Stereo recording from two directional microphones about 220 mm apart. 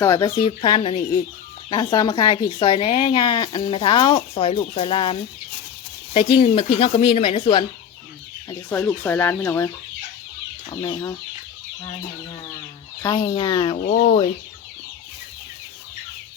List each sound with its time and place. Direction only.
0.0 s speech: 15° left (ahead or behind)
6.3 s speech: 25° left (ahead or behind)
8.4 s speech: 10° left (ahead or behind)
13.0 s speech: 20° left (ahead or behind)